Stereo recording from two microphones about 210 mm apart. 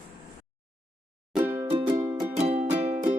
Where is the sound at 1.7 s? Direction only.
25° right (ahead or behind).